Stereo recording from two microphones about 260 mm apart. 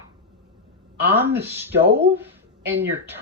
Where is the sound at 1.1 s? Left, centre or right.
Centre.